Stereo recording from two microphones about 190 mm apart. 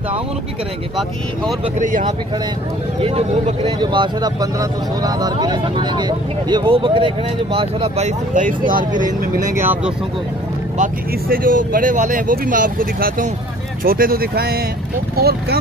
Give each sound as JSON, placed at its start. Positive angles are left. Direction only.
{"t": 1.8, "sound": "speech", "side_deg": -40}
{"t": 3.0, "sound": "speech", "side_deg": -30}
{"t": 8.4, "sound": "speech", "side_deg": -45}
{"t": 10.8, "sound": "speech", "side_deg": -50}